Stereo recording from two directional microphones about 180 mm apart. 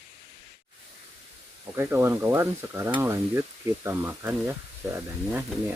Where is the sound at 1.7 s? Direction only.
15° right (ahead or behind).